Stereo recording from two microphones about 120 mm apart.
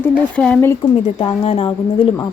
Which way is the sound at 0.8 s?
45° left (ahead or behind).